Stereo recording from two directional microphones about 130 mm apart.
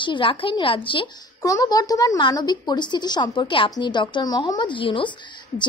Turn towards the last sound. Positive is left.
turn(degrees=40)  # may be behind; listen again after turning